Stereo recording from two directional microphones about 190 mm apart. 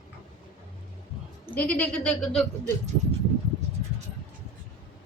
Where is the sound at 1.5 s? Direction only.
10° left (ahead or behind).